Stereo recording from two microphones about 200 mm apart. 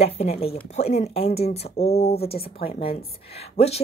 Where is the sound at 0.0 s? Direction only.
30° left (ahead or behind).